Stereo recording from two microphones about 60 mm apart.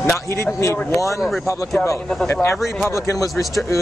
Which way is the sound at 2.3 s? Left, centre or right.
Left.